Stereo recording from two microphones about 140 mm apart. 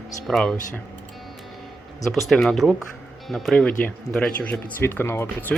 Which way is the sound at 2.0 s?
Centre (ahead or behind).